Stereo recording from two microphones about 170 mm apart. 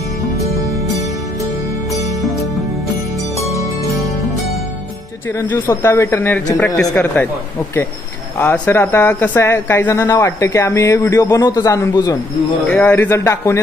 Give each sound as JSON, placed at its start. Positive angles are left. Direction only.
{"t": 3.3, "sound": "music", "side_deg": 20}
{"t": 5.4, "sound": "speech", "side_deg": 15}
{"t": 8.4, "sound": "speech", "side_deg": 15}
{"t": 12.6, "sound": "speech", "side_deg": 10}